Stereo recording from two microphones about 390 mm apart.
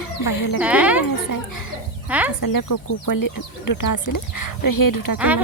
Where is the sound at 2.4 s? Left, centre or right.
Left.